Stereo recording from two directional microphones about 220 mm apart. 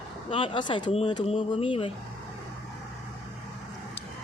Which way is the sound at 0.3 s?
25° left (ahead or behind).